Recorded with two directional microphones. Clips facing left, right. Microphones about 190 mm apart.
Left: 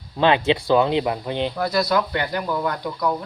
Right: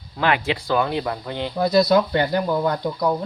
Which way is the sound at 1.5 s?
20° right (ahead or behind).